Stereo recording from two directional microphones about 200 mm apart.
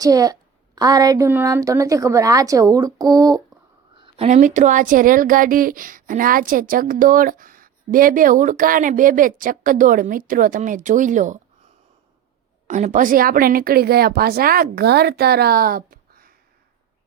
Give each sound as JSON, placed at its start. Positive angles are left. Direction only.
{"t": 0.0, "sound": "a woman's voice", "side_deg": -20}
{"t": 4.0, "sound": "speech", "side_deg": -30}